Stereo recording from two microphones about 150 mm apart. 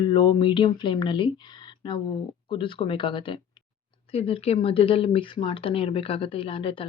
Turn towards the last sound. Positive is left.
turn(degrees=35)  # may be behind; listen again after turning